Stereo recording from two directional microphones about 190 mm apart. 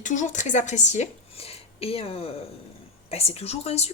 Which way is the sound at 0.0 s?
40° left (ahead or behind).